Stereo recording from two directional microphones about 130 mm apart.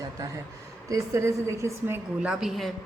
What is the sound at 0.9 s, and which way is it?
A woman's voice, 20° right (ahead or behind).